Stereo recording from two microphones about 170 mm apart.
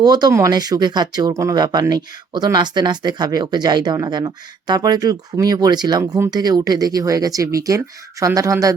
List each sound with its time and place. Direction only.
0.0 s speech: 25° right (ahead or behind)